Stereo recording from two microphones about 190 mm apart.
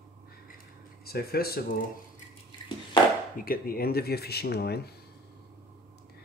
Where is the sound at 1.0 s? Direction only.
55° left (ahead or behind).